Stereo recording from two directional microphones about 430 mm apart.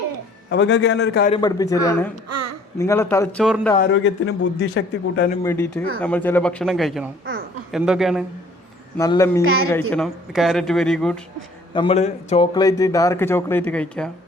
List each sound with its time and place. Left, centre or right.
0.5 s a man's voice: left
1.3 s speech: centre
2.3 s babbling: right
2.7 s speech: centre
3.8 s a man's voice: left
5.4 s speech: centre
11.7 s speech: centre